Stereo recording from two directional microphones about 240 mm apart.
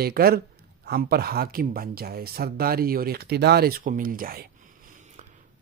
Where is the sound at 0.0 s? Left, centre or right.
Right.